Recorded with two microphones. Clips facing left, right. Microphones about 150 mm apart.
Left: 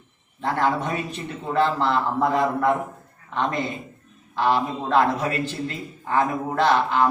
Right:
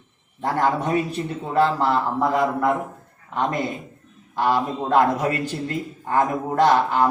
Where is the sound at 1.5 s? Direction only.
40° right (ahead or behind).